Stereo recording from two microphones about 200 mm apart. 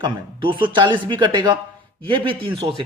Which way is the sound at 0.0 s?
25° right (ahead or behind).